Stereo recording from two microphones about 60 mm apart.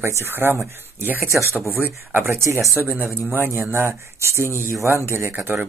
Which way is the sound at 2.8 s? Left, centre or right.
Right.